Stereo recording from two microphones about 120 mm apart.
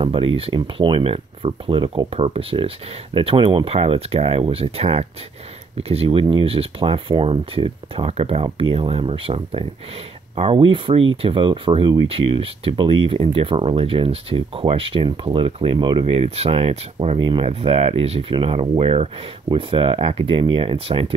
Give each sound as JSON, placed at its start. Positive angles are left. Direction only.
{"t": 0.0, "sound": "speech", "side_deg": -50}
{"t": 16.1, "sound": "speech", "side_deg": -55}